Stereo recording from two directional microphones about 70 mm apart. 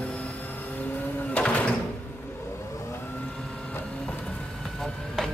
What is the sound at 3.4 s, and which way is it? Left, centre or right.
Vehicle, centre.